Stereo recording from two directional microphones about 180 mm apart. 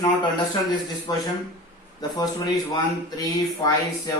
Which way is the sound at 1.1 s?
20° left (ahead or behind).